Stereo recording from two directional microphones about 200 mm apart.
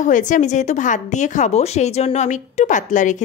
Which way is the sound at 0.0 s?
40° left (ahead or behind).